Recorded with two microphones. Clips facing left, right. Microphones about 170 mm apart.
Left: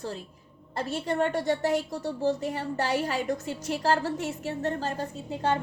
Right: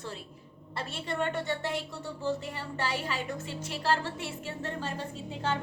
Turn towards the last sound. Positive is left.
turn(degrees=40)  # may be behind; listen again after turning